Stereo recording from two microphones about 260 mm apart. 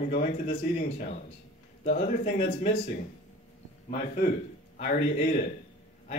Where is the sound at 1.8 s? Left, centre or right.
Left.